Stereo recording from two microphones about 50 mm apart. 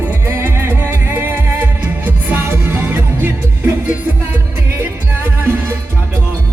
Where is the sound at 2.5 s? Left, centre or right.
Right.